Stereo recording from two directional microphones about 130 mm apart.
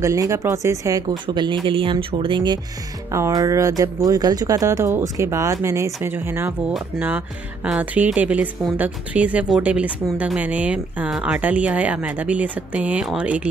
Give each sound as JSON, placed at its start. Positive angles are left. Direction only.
{"t": 0.0, "sound": "speech", "side_deg": -25}
{"t": 3.1, "sound": "speech", "side_deg": -25}